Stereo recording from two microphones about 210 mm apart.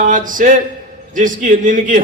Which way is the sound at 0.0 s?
40° right (ahead or behind).